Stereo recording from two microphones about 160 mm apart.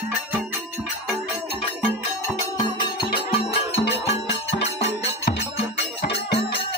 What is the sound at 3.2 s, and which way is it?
Music, 35° left (ahead or behind).